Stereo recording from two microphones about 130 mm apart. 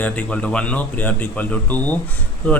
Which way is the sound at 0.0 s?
10° left (ahead or behind).